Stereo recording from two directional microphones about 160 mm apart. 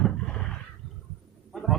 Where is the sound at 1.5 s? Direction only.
Centre (ahead or behind).